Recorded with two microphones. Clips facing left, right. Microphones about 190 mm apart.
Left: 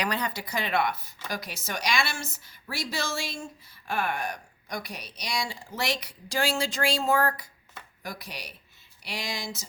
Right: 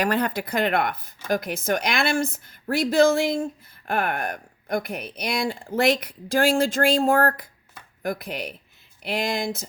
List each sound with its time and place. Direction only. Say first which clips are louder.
0.0 s a woman's voice: right 7 dB; 55° right (ahead or behind)